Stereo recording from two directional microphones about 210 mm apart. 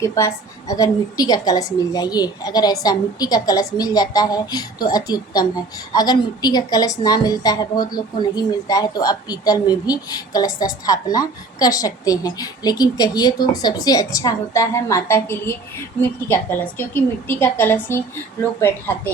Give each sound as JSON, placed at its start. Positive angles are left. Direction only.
{"t": 0.0, "sound": "a woman's voice", "side_deg": 15}